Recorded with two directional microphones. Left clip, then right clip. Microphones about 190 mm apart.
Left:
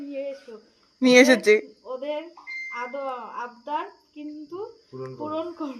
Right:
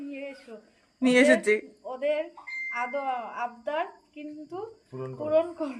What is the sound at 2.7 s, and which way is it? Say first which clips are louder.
A woman's voice: right 2 dB; 10° right (ahead or behind).